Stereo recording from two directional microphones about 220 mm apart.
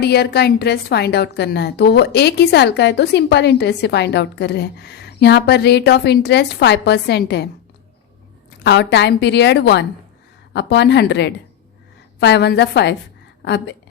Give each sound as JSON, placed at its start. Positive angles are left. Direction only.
{"t": 0.0, "sound": "a woman's voice", "side_deg": 50}
{"t": 8.6, "sound": "a woman's voice", "side_deg": 50}